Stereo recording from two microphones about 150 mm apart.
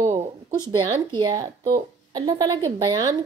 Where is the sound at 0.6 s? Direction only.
30° right (ahead or behind).